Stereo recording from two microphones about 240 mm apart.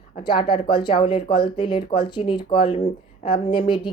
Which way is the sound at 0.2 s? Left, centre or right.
Centre.